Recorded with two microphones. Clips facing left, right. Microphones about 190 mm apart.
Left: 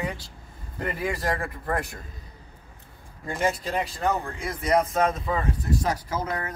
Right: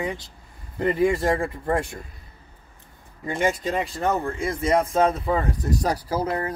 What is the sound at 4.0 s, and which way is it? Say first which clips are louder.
Speech: right 3 dB; 25° right (ahead or behind).